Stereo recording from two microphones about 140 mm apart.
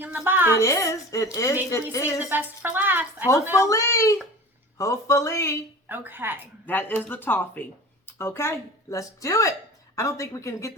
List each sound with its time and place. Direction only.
0.0 s a woman's voice: 10° right (ahead or behind)
0.6 s a woman's voice: 20° left (ahead or behind)
2.1 s a woman's voice: 10° right (ahead or behind)
3.6 s a woman's voice: 20° left (ahead or behind)
5.9 s a woman's voice: 15° right (ahead or behind)
6.7 s speech: 15° left (ahead or behind)